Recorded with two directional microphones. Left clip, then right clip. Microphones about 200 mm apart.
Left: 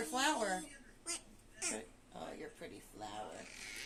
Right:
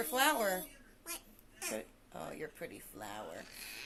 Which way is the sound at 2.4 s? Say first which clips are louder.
Right 5 dB; 65° right (ahead or behind).